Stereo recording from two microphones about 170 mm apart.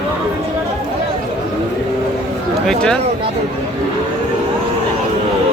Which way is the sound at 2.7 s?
5° left (ahead or behind).